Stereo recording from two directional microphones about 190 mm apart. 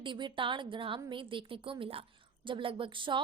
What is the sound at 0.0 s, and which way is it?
A woman's voice, 25° right (ahead or behind).